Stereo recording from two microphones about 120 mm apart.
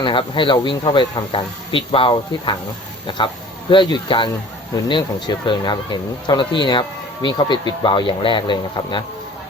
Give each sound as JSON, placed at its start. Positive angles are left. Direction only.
{"t": 0.0, "sound": "speech", "side_deg": 45}